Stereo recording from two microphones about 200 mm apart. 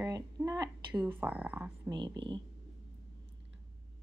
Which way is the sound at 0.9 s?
10° right (ahead or behind).